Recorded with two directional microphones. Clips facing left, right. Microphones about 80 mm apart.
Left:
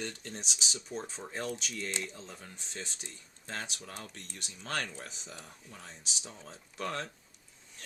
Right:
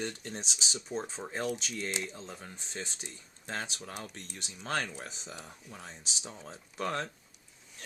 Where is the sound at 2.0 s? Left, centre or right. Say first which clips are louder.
Right 1 dB; centre.